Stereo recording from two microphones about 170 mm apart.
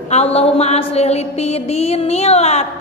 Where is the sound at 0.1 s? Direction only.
40° left (ahead or behind).